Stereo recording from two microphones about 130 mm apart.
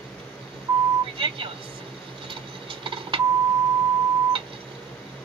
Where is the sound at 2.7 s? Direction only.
40° right (ahead or behind).